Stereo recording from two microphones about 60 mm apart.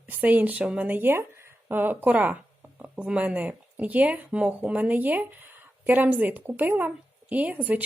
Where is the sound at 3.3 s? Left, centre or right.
Right.